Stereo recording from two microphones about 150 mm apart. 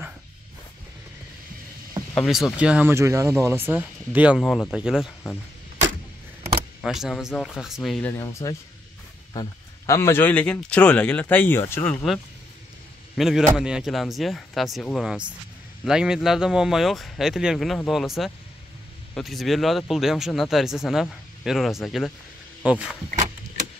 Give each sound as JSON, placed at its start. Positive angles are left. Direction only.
{"t": 2.2, "sound": "speech", "side_deg": 0}
{"t": 4.4, "sound": "speech", "side_deg": 0}
{"t": 6.8, "sound": "speech", "side_deg": 0}
{"t": 8.1, "sound": "a man's voice", "side_deg": 20}